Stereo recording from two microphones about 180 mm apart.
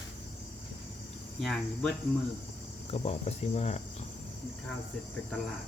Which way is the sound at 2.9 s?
35° left (ahead or behind).